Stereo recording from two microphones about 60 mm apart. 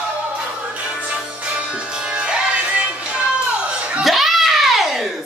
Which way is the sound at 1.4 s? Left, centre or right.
Centre.